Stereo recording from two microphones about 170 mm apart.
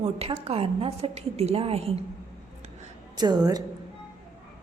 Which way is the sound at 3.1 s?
25° right (ahead or behind).